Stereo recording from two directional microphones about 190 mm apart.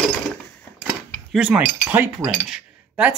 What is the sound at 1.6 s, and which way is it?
Speech, 10° right (ahead or behind).